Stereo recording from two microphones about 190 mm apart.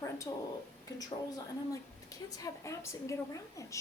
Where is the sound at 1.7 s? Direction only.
20° left (ahead or behind).